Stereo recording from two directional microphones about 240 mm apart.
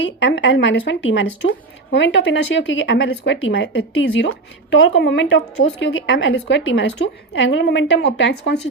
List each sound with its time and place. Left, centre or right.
0.0 s speech: left